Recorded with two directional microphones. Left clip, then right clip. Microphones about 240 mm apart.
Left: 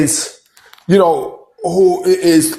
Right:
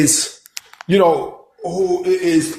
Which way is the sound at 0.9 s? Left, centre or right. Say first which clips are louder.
Left 2 dB; left.